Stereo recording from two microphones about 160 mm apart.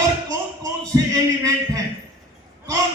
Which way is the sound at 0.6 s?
20° right (ahead or behind).